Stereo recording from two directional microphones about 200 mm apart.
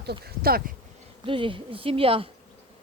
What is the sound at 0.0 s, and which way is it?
Speech, 50° right (ahead or behind).